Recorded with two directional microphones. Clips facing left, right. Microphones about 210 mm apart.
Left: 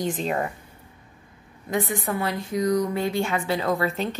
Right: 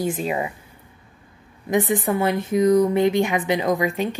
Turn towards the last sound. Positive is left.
turn(degrees=-15)  # may be behind; listen again after turning